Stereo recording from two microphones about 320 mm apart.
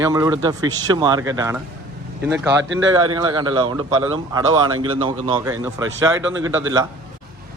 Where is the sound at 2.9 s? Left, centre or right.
Centre.